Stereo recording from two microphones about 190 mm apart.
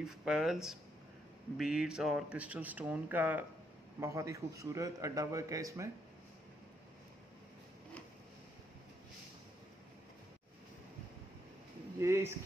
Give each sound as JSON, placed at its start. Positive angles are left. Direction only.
{"t": 0.0, "sound": "speech", "side_deg": 0}
{"t": 12.0, "sound": "speech", "side_deg": -15}